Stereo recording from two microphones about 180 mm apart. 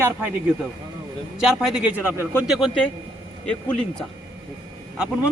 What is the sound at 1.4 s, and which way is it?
A man's voice, 5° right (ahead or behind).